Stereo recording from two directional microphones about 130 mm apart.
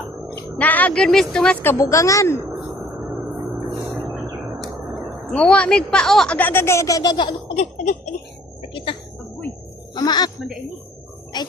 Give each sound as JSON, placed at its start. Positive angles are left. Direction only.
{"t": 0.6, "sound": "a woman's voice", "side_deg": 10}
{"t": 1.6, "sound": "a woman's voice", "side_deg": 20}
{"t": 5.2, "sound": "a woman's voice", "side_deg": 5}
{"t": 7.5, "sound": "a sound", "side_deg": 65}
{"t": 8.7, "sound": "a sound", "side_deg": 40}
{"t": 9.9, "sound": "music", "side_deg": 30}
{"t": 11.3, "sound": "speech", "side_deg": 35}